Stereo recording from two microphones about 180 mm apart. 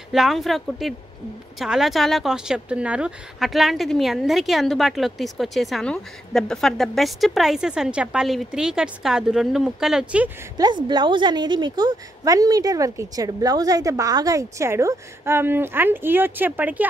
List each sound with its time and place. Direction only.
0.1 s speech: centre (ahead or behind)
10.6 s a woman's voice: 25° right (ahead or behind); by 16.8 s 10° right (ahead or behind)